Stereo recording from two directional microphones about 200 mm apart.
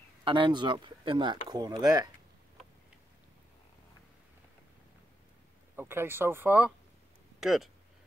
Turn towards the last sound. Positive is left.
turn(degrees=0)  # may be behind; listen again after turning